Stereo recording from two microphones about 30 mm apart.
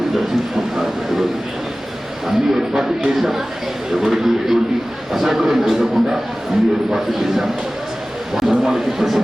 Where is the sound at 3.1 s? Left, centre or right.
Centre.